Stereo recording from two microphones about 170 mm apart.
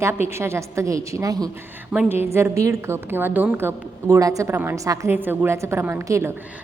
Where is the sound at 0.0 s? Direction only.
15° right (ahead or behind).